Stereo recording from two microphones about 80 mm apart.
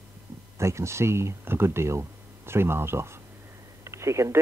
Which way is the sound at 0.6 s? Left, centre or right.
Right.